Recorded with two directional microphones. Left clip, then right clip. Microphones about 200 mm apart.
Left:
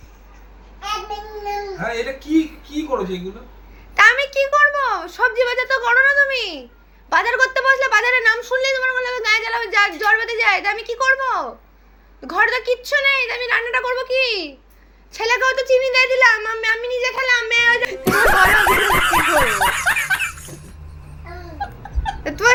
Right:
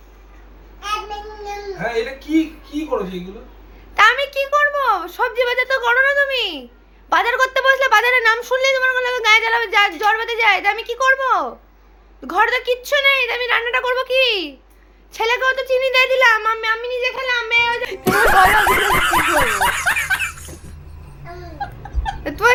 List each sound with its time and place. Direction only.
3.9 s a sound: 10° right (ahead or behind)
7.1 s a child's voice: 15° right (ahead or behind)
15.9 s speech: 20° right (ahead or behind); by 20.7 s centre (ahead or behind)
21.6 s laughter: centre (ahead or behind)